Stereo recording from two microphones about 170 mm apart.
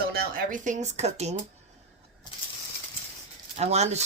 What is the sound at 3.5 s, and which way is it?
Speech, 40° right (ahead or behind).